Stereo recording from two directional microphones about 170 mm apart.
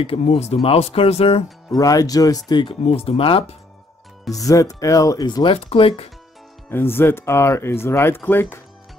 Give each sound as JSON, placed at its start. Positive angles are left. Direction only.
{"t": 0.0, "sound": "speech", "side_deg": 35}
{"t": 1.8, "sound": "speech", "side_deg": 20}
{"t": 4.3, "sound": "speech", "side_deg": 20}
{"t": 6.7, "sound": "speech", "side_deg": 15}